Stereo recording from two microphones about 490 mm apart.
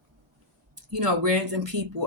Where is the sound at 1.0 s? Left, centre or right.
Right.